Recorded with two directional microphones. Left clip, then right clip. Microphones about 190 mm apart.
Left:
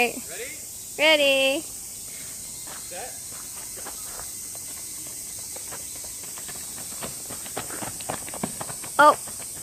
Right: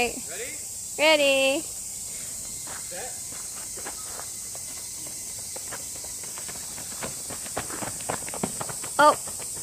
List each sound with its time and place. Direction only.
0.0 s snake: 40° left (ahead or behind)
0.9 s speech: 10° left (ahead or behind)
7.5 s walk: centre (ahead or behind)
8.9 s speech: 20° left (ahead or behind)